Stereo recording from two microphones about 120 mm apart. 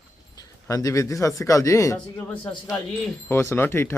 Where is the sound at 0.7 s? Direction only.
25° left (ahead or behind).